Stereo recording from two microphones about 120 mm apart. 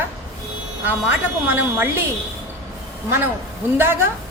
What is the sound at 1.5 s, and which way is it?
Speech, 15° right (ahead or behind).